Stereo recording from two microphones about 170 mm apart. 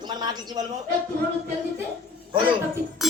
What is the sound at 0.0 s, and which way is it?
Speech, 25° right (ahead or behind).